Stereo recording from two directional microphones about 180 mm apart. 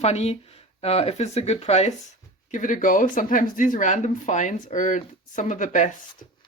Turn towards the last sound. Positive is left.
turn(degrees=45)  # may be behind; listen again after turning